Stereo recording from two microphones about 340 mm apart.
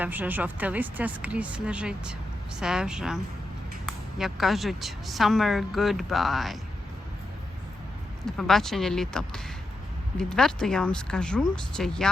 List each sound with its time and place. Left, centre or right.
0.0 s a woman's voice: centre
8.2 s a woman's voice: centre